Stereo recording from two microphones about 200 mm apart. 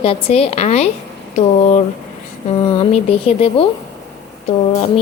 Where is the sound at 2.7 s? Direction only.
30° left (ahead or behind).